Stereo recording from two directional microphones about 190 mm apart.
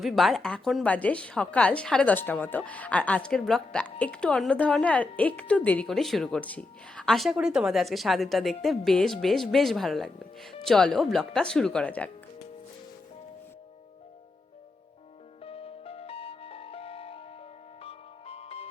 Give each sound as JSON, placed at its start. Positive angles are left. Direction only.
{"t": 0.0, "sound": "a woman's voice", "side_deg": 0}
{"t": 15.4, "sound": "music", "side_deg": 30}